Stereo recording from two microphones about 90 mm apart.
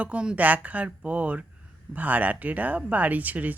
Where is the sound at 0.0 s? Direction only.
10° right (ahead or behind).